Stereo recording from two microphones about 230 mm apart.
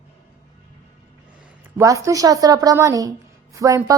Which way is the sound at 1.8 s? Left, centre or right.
Centre.